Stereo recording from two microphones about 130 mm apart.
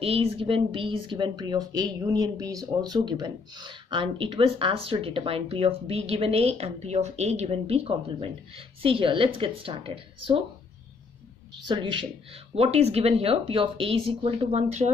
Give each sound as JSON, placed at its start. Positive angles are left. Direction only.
{"t": 0.0, "sound": "speech", "side_deg": -50}
{"t": 11.6, "sound": "speech", "side_deg": -40}
{"t": 12.5, "sound": "speech", "side_deg": -55}